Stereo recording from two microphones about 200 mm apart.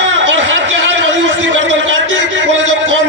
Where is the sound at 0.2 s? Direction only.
70° right (ahead or behind).